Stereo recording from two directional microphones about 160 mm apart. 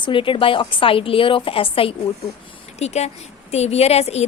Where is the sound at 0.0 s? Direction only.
35° left (ahead or behind).